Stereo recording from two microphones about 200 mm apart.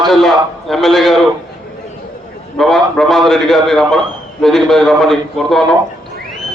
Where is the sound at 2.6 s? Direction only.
Centre (ahead or behind).